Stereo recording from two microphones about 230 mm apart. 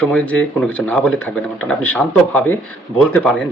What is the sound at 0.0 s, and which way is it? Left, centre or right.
Speech, centre.